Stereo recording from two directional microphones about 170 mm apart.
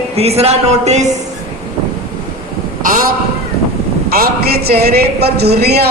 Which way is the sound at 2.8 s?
55° right (ahead or behind).